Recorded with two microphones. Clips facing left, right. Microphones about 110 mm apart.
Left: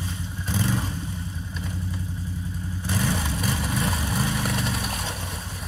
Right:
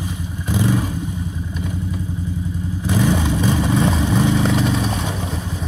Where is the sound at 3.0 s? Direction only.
75° right (ahead or behind).